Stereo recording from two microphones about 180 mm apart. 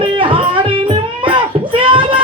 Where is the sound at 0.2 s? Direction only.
30° right (ahead or behind).